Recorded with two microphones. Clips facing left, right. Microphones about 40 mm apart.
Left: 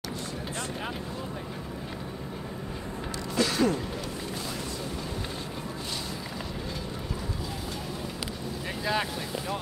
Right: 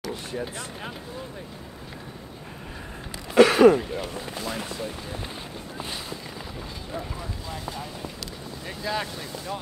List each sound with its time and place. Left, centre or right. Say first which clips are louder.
3.3 s throat clearing: right 11 dB; right
3.7 s speech: right 6 dB; right
8.6 s speech: even; centre